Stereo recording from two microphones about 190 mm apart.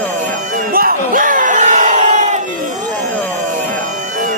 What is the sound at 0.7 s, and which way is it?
Crowd, 50° right (ahead or behind).